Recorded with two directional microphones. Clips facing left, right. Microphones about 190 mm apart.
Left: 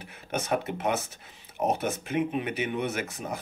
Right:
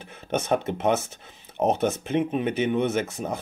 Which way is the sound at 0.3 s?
25° right (ahead or behind).